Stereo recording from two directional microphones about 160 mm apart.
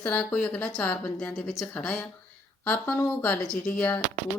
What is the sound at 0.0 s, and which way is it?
A woman's voice, 10° left (ahead or behind).